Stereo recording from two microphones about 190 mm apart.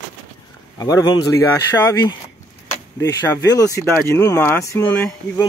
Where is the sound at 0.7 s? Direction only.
20° left (ahead or behind).